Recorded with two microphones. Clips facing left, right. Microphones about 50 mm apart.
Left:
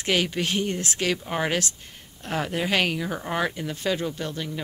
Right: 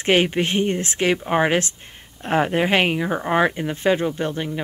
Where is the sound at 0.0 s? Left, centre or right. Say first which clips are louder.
Right 6 dB; right.